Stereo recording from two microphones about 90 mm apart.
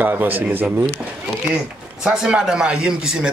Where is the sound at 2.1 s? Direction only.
5° right (ahead or behind).